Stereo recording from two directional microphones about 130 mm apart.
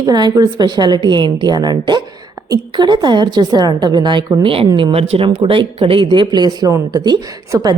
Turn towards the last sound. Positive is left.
turn(degrees=-30)  # may be behind; listen again after turning